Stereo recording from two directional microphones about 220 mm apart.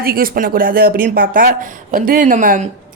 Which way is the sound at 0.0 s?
40° right (ahead or behind).